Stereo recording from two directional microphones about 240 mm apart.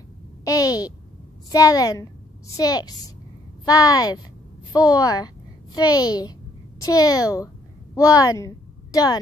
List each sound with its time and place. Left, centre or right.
0.5 s a child's voice: centre